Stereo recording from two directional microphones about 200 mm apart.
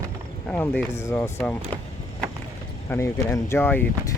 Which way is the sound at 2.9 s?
15° left (ahead or behind).